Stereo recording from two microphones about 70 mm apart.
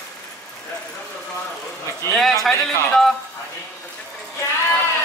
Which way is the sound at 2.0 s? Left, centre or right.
Left.